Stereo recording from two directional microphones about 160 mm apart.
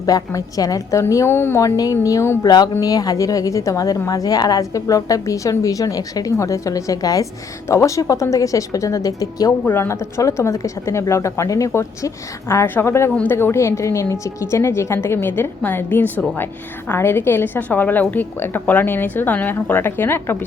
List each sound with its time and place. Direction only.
0.0 s a woman's voice: 20° left (ahead or behind)